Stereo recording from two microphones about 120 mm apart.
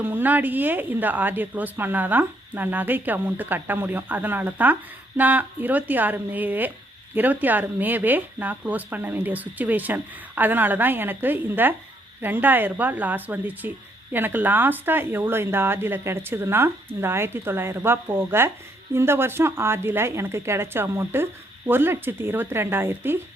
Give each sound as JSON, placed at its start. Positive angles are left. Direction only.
{"t": 0.0, "sound": "speech", "side_deg": -15}